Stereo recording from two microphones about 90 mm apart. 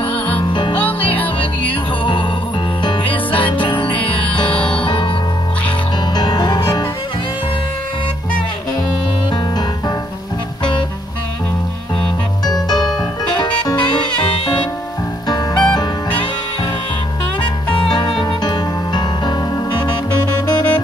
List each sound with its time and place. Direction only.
0.4 s music: 60° left (ahead or behind)
0.7 s music: 20° left (ahead or behind)
1.4 s music: 70° left (ahead or behind)
6.1 s music: 50° left (ahead or behind)
12.4 s music: 50° left (ahead or behind)
15.2 s music: 50° left (ahead or behind)
17.7 s music: 55° left (ahead or behind)